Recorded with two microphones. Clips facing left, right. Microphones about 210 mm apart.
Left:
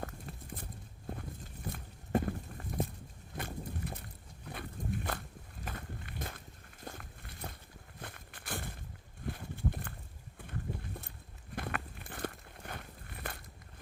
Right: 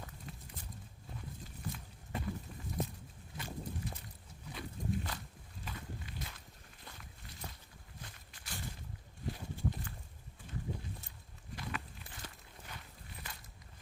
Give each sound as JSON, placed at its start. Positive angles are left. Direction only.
{"t": 0.0, "sound": "clip-clop", "side_deg": 55}
{"t": 1.7, "sound": "walk", "side_deg": 55}
{"t": 3.3, "sound": "a sound", "side_deg": 55}
{"t": 5.6, "sound": "walk", "side_deg": 55}
{"t": 7.9, "sound": "a sound", "side_deg": 55}
{"t": 11.5, "sound": "walk", "side_deg": 55}